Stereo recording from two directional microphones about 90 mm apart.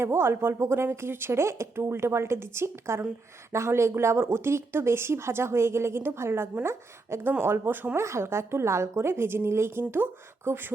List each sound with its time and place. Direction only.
0.0 s speech: 30° right (ahead or behind)